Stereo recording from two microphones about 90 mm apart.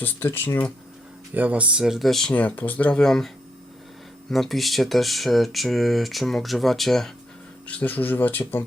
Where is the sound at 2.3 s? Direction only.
20° left (ahead or behind).